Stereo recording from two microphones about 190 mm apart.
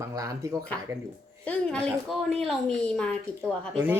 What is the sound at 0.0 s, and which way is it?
Speech, 15° right (ahead or behind).